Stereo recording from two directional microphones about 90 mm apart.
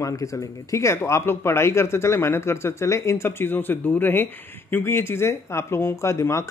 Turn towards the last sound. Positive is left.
turn(degrees=30)  # may be behind; listen again after turning